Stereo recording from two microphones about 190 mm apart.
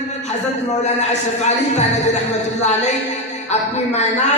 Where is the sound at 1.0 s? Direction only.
35° left (ahead or behind).